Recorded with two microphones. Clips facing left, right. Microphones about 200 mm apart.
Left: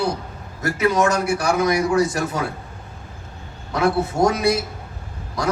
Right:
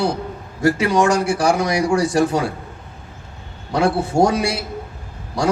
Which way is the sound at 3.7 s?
30° right (ahead or behind).